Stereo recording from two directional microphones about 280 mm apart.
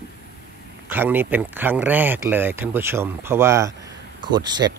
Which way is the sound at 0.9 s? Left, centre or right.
Centre.